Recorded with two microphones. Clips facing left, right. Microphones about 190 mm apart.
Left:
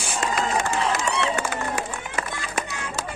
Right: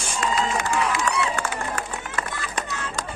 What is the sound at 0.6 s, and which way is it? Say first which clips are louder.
Run: even; 25° left (ahead or behind).